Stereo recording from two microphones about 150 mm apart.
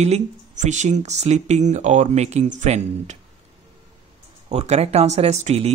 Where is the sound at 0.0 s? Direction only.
50° right (ahead or behind).